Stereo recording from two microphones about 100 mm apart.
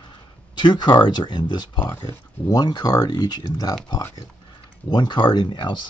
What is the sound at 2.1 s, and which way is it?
Speech, 35° left (ahead or behind).